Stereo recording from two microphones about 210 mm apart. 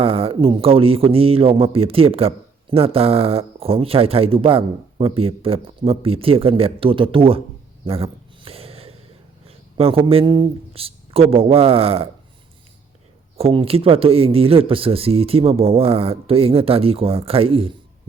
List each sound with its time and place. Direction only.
0.0 s a man's voice: 30° right (ahead or behind)
7.9 s a sound: 25° right (ahead or behind)
9.5 s speech: 25° right (ahead or behind)
13.3 s a man's voice: 25° right (ahead or behind)